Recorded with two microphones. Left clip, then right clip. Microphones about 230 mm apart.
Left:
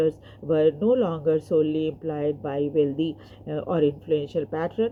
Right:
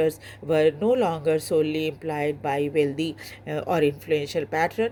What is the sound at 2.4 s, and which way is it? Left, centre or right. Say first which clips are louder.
A woman's voice: right 1 dB; right.